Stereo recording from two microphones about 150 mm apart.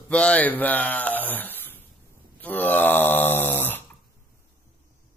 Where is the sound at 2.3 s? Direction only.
10° left (ahead or behind).